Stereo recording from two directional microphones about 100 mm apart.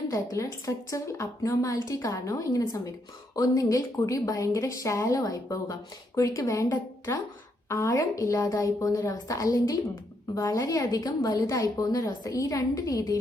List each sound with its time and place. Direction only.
0.1 s a woman's voice: 30° left (ahead or behind)